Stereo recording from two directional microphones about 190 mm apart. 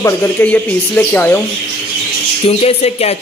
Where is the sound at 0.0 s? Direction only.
10° left (ahead or behind).